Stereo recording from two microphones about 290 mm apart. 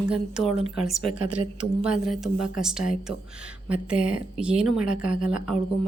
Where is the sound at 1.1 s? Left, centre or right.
Right.